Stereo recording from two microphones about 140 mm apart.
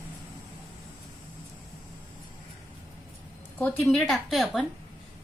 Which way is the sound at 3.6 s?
5° left (ahead or behind).